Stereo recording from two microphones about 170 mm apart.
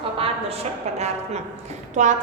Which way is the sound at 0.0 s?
35° right (ahead or behind).